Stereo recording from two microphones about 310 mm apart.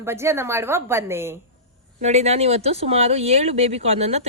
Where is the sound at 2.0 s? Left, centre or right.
Right.